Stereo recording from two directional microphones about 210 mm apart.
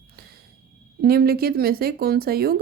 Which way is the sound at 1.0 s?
45° right (ahead or behind).